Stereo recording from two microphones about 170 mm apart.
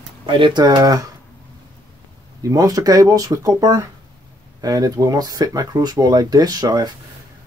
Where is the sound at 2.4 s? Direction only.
20° right (ahead or behind).